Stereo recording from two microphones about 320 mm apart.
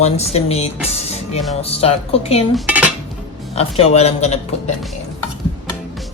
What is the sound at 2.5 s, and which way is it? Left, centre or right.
Cutlery, centre.